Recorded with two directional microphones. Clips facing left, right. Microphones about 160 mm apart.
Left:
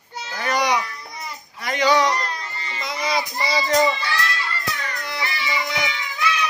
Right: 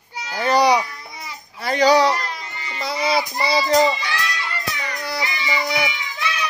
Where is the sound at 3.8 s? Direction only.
15° right (ahead or behind).